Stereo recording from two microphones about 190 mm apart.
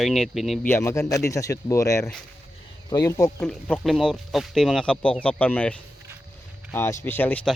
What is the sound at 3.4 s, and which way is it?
Speech, 5° left (ahead or behind).